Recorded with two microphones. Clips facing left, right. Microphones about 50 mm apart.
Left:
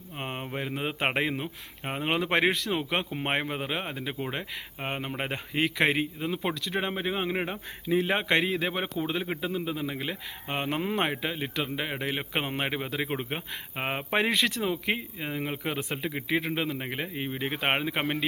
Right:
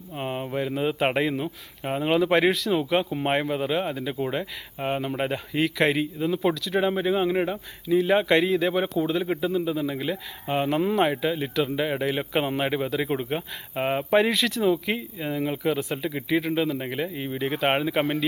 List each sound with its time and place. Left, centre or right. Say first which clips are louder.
0.2 s speech: right 6 dB; centre
7.9 s speech: right 4 dB; left
8.1 s speech: right 5 dB; centre